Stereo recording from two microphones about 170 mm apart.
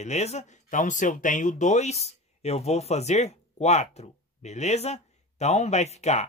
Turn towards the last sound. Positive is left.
turn(degrees=40)  # may be behind; listen again after turning